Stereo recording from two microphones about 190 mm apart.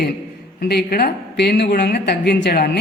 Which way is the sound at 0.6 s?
55° left (ahead or behind).